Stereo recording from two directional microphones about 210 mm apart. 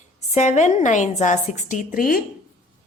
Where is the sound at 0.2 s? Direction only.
35° left (ahead or behind).